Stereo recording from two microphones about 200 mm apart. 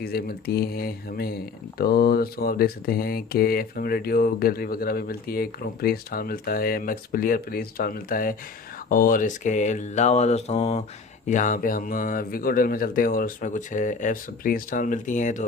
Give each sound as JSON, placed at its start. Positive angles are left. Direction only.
{"t": 0.0, "sound": "speech", "side_deg": 50}
{"t": 8.9, "sound": "mantra", "side_deg": 45}
{"t": 11.3, "sound": "speech", "side_deg": 40}